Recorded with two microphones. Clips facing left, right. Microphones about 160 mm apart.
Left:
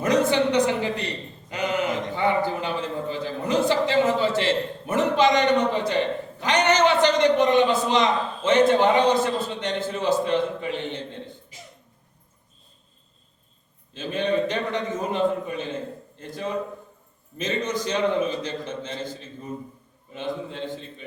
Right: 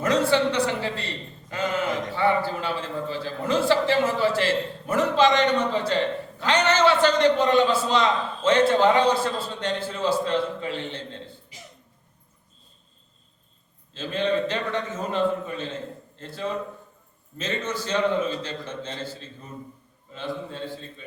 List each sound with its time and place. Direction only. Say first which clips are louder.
0.0 s a man's voice: left 1 dB; 20° left (ahead or behind)
13.9 s a man's voice: left 1 dB; 15° left (ahead or behind)
20.1 s a man's voice: left 2 dB; 20° left (ahead or behind)